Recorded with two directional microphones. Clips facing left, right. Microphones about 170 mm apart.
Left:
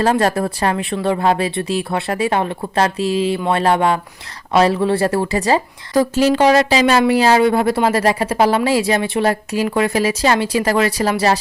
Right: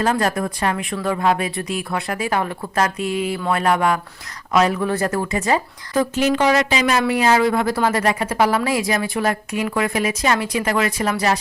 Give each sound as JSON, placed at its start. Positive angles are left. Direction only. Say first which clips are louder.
{"t": 0.0, "sound": "speech", "louder": "left 4 dB", "side_deg": 30}